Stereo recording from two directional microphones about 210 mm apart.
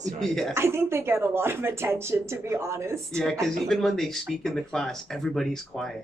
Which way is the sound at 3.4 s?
Centre (ahead or behind).